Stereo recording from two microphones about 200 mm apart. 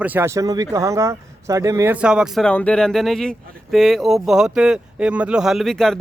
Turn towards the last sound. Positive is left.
turn(degrees=0)  # may be behind; listen again after turning